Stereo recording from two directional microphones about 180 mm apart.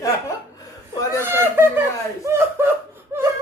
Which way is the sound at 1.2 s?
15° right (ahead or behind).